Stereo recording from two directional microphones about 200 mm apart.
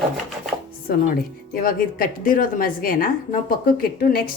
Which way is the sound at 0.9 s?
45° left (ahead or behind).